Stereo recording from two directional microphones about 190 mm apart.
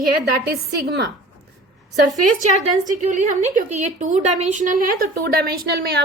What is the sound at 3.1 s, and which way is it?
A woman's voice, 40° right (ahead or behind).